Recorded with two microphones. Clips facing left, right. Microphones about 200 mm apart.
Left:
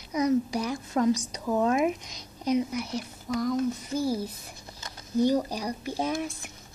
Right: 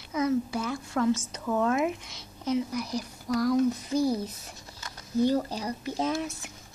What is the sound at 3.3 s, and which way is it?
Speech, 5° left (ahead or behind).